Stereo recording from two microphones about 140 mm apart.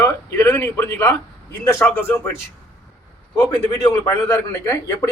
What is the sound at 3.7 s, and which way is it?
Speech, 25° left (ahead or behind).